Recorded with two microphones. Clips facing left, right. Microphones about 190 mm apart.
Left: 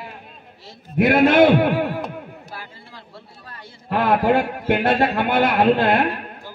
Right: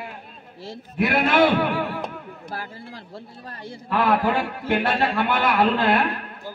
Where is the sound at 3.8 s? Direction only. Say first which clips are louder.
Left 3 dB; 50° left (ahead or behind).